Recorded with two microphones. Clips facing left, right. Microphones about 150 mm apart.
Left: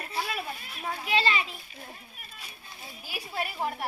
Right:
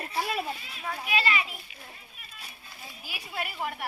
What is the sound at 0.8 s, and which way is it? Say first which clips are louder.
Children playing: left 2 dB; 30° left (ahead or behind).